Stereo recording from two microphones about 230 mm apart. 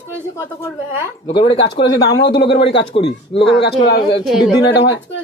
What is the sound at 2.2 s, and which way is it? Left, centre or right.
Speech, left.